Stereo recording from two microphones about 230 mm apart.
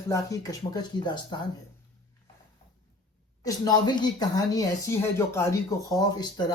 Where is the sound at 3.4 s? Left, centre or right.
Centre.